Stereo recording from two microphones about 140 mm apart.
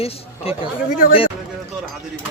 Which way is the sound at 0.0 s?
45° left (ahead or behind).